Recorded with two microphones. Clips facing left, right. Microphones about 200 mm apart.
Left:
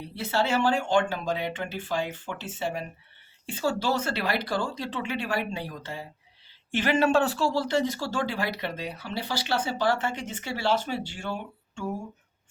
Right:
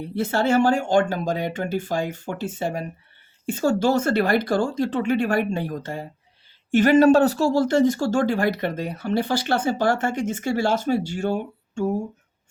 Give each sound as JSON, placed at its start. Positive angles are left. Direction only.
{"t": 0.0, "sound": "speech", "side_deg": -50}